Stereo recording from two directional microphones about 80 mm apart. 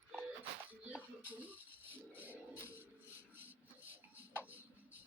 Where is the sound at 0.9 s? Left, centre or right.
Centre.